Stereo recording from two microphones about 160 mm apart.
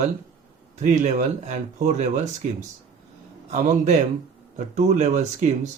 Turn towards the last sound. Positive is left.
turn(degrees=-50)  # may be behind; listen again after turning